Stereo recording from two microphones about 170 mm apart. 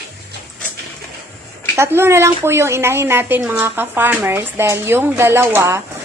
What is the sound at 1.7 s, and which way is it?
A woman's voice, 15° right (ahead or behind).